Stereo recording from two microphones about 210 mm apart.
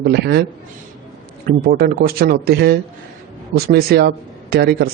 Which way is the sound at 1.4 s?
45° right (ahead or behind).